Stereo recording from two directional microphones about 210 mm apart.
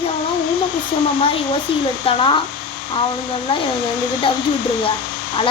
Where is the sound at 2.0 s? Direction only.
25° left (ahead or behind).